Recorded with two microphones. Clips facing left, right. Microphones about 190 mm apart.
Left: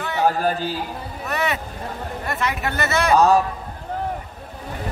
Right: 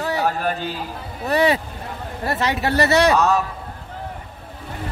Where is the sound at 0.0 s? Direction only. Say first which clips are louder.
Left 1 dB; 35° right (ahead or behind).